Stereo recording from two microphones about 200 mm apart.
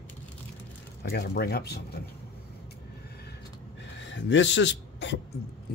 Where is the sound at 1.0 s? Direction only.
55° left (ahead or behind).